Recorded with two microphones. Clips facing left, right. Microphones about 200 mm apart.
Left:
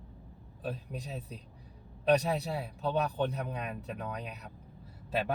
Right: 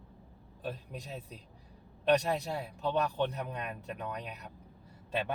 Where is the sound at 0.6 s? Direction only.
Centre (ahead or behind).